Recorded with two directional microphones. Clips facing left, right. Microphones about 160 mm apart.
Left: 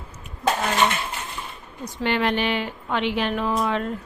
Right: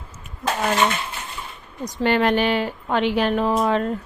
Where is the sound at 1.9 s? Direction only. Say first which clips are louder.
Right 4 dB; 40° right (ahead or behind).